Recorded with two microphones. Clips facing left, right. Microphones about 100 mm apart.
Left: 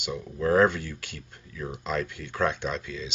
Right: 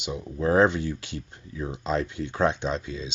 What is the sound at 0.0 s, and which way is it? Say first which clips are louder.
Speech: right 1 dB; 20° right (ahead or behind).